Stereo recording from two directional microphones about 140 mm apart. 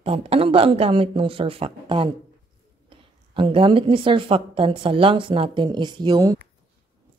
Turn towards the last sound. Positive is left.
turn(degrees=-30)  # may be behind; listen again after turning